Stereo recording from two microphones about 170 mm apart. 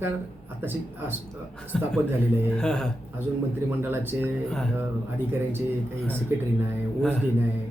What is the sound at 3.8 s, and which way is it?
Speech, 15° right (ahead or behind).